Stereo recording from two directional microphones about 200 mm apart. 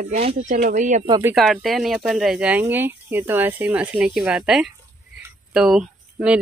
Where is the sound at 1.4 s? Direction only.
Centre (ahead or behind).